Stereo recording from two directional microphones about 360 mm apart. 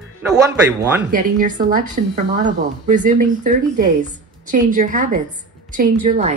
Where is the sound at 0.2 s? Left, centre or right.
Centre.